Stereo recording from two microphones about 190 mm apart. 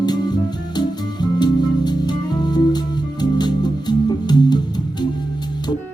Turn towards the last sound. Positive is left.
turn(degrees=20)  # may be behind; listen again after turning